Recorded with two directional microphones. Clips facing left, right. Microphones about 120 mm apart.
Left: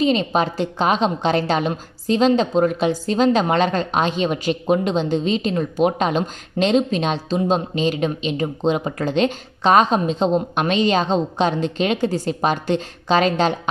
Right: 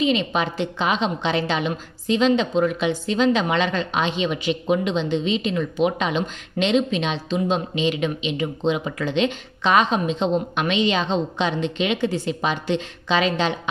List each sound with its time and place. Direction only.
0.0 s a woman's voice: 40° left (ahead or behind)